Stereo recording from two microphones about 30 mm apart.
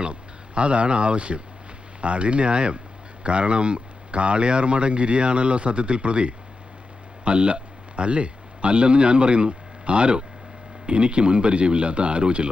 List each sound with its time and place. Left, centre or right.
0.0 s speech: right